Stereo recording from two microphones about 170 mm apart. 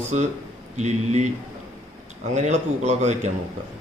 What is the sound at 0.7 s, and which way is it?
Speech, 40° right (ahead or behind).